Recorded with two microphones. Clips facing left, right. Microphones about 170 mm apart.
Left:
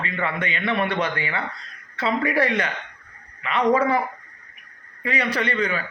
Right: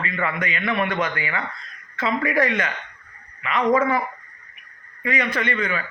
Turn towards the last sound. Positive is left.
turn(degrees=35)  # may be behind; listen again after turning